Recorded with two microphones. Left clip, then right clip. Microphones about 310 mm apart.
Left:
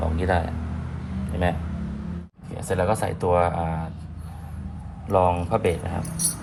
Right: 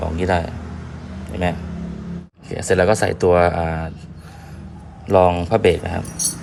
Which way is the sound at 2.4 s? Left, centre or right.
Centre.